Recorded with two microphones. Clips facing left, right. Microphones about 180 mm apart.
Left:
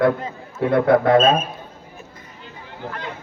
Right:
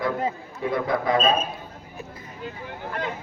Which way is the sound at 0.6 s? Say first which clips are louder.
Left 9 dB; 65° left (ahead or behind).